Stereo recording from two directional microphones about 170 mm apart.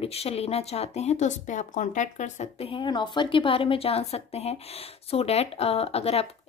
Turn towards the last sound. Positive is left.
turn(degrees=35)  # may be behind; listen again after turning